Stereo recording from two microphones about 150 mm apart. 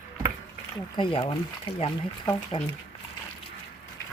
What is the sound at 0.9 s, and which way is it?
A woman's voice, 35° left (ahead or behind).